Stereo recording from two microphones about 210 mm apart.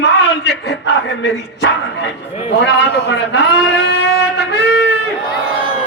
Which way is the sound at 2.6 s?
55° left (ahead or behind).